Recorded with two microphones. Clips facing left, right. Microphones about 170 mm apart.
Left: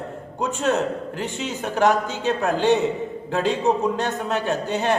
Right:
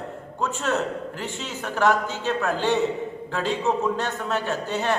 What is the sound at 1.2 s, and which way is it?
A man's voice, 20° left (ahead or behind).